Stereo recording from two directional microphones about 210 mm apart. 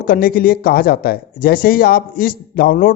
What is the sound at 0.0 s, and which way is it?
Speech, 45° left (ahead or behind).